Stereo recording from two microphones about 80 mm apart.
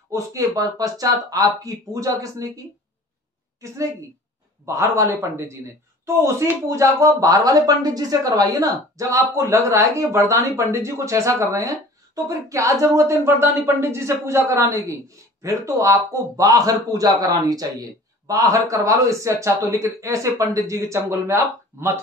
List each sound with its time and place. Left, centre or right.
0.1 s speech: right
0.6 s a man's voice: right
4.6 s a man's voice: right